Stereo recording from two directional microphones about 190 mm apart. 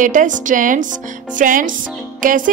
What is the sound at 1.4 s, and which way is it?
Music, 45° right (ahead or behind).